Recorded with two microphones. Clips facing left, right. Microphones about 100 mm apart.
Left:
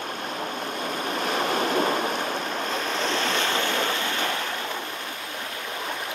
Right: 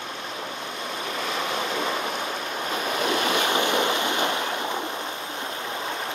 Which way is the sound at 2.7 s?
10° right (ahead or behind).